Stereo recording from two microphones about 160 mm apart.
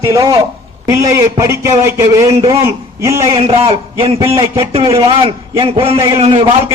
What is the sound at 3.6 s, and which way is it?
A man's voice, 35° right (ahead or behind).